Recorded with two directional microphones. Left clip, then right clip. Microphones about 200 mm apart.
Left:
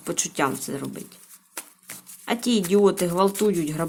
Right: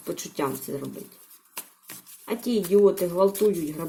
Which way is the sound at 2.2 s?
20° left (ahead or behind).